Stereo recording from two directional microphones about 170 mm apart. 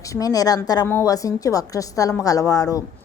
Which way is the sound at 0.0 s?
20° left (ahead or behind).